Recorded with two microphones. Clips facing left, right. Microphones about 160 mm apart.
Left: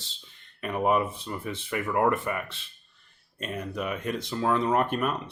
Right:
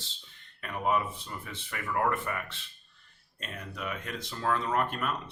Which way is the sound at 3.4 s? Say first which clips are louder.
Left 8 dB; 20° left (ahead or behind).